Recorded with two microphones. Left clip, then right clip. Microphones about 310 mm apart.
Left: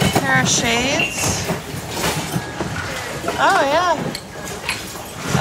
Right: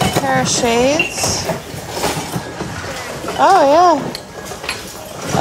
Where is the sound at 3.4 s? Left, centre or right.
Centre.